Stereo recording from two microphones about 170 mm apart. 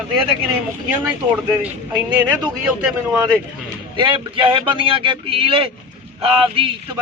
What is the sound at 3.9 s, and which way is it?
A man's voice, 30° right (ahead or behind).